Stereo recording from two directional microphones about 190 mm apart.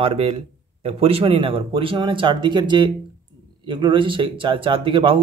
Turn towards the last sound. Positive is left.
turn(degrees=-25)  # may be behind; listen again after turning